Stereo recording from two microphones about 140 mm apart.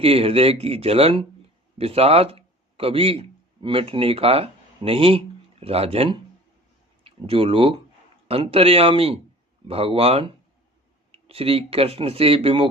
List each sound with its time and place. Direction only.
0.0 s speech: 45° right (ahead or behind)